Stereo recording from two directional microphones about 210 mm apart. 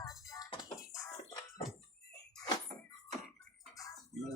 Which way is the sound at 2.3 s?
20° left (ahead or behind).